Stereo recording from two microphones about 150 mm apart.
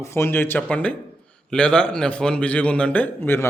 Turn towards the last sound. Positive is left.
turn(degrees=10)  # may be behind; listen again after turning